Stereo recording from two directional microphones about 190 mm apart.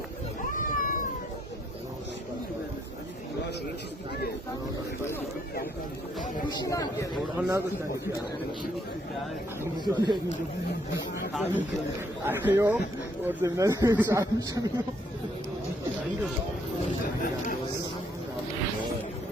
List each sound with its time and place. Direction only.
0.5 s cat: 45° left (ahead or behind)
6.5 s speech: 20° left (ahead or behind)
7.3 s speech: 10° right (ahead or behind)
9.8 s speech: 20° right (ahead or behind)
12.2 s speech: 10° right (ahead or behind)